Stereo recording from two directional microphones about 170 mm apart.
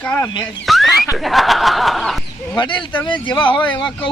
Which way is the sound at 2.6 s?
30° left (ahead or behind).